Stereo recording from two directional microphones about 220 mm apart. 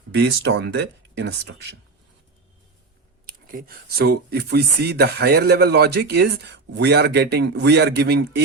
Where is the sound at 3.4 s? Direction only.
45° right (ahead or behind).